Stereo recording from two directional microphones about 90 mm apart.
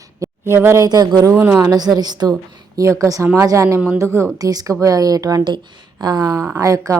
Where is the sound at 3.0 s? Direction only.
35° right (ahead or behind).